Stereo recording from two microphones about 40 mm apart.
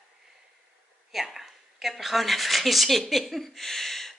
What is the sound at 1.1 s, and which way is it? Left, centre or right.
Speech, centre.